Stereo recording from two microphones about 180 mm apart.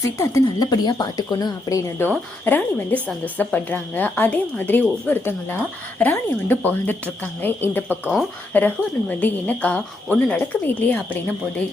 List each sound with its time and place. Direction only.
0.2 s a woman's voice: 20° left (ahead or behind)